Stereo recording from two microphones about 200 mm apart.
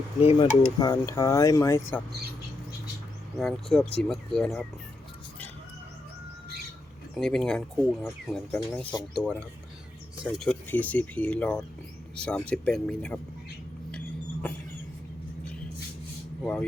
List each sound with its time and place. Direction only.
0.2 s speech: 30° left (ahead or behind)
0.8 s speech: 15° left (ahead or behind)
3.3 s speech: centre (ahead or behind)
7.2 s speech: 5° left (ahead or behind)
16.4 s speech: 5° left (ahead or behind)